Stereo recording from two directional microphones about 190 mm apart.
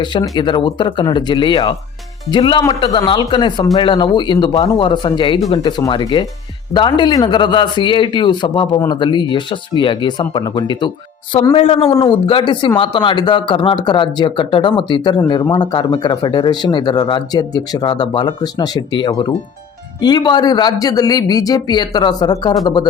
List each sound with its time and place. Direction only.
0.0 s speech: 25° left (ahead or behind)